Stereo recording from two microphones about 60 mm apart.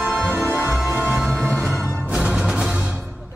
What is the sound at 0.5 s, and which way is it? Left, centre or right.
Music, right.